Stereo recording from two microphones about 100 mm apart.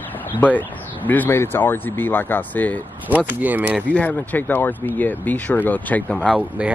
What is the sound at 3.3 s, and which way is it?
Speech, 15° right (ahead or behind).